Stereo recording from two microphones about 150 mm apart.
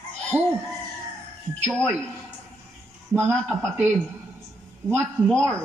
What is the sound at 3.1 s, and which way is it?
Speech, 15° right (ahead or behind).